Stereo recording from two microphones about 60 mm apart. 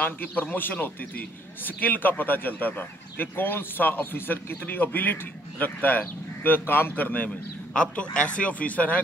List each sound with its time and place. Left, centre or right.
0.0 s a man's voice: left
7.2 s a man's voice: centre